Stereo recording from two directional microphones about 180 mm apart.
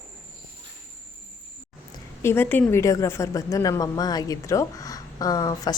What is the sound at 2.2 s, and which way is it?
A woman's voice, 10° left (ahead or behind).